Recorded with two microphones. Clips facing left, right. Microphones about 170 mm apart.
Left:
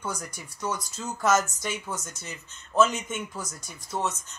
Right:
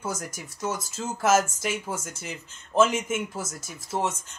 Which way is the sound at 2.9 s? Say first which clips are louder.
Right 5 dB; 10° right (ahead or behind).